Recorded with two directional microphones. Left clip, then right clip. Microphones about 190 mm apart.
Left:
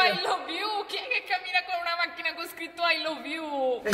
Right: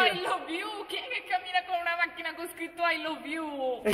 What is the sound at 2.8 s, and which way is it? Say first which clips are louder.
Speech: left 3 dB; centre (ahead or behind).